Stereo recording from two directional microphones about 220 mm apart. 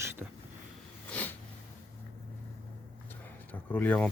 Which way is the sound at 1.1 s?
5° left (ahead or behind).